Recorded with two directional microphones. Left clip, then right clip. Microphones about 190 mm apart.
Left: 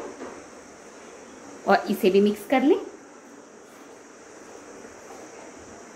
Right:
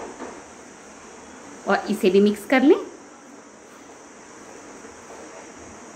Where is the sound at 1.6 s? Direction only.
5° left (ahead or behind); by 2.8 s 10° right (ahead or behind).